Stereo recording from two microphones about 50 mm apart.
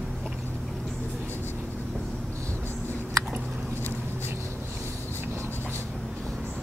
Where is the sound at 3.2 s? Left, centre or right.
Right.